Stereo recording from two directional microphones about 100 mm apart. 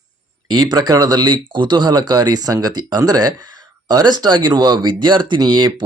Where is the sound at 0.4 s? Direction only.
45° right (ahead or behind).